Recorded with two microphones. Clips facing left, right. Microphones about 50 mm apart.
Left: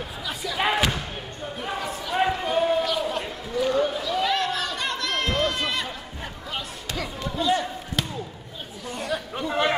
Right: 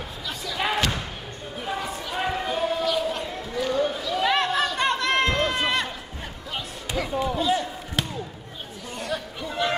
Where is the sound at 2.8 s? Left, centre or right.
Centre.